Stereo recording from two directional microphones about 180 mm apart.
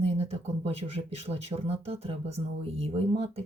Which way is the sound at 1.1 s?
35° right (ahead or behind).